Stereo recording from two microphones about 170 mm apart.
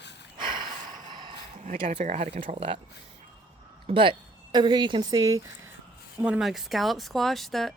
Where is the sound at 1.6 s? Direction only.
45° right (ahead or behind).